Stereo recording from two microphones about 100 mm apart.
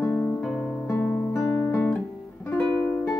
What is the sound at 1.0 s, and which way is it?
Guitar, 10° left (ahead or behind).